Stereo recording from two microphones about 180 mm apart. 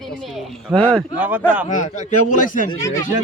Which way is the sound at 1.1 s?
10° right (ahead or behind).